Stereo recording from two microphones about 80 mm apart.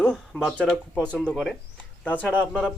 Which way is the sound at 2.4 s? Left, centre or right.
Centre.